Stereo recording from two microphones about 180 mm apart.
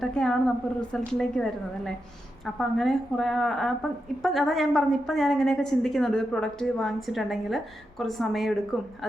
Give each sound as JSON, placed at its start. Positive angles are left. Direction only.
{"t": 0.0, "sound": "a woman's voice", "side_deg": 5}